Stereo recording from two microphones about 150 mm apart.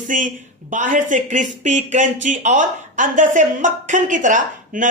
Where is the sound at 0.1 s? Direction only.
60° right (ahead or behind).